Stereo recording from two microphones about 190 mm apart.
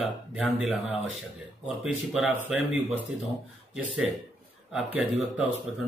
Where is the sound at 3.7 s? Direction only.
5° right (ahead or behind).